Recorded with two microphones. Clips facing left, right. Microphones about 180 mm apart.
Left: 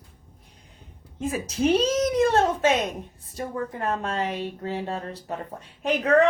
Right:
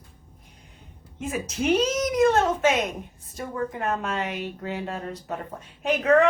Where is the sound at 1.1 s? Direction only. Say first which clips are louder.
Left 2 dB; 35° left (ahead or behind).